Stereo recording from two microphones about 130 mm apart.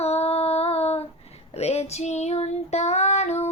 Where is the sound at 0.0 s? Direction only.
50° left (ahead or behind).